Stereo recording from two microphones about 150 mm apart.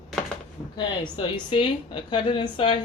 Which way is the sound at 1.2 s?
35° left (ahead or behind).